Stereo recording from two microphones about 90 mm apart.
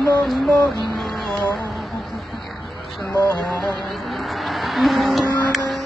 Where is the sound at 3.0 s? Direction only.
30° left (ahead or behind).